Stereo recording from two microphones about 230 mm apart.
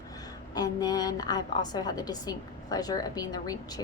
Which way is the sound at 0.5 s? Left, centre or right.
Centre.